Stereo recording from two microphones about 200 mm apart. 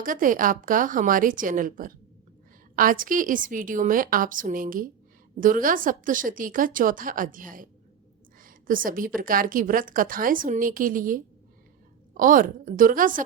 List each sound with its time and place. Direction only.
0.0 s a woman's voice: 40° right (ahead or behind)